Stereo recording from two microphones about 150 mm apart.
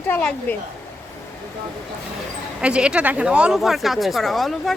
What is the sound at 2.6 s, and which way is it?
Speech, 5° right (ahead or behind).